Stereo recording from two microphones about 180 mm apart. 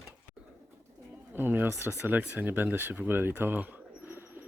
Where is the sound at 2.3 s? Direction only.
10° right (ahead or behind).